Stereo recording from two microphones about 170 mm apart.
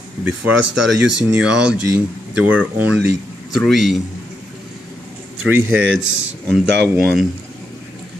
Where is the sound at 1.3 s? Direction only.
5° right (ahead or behind).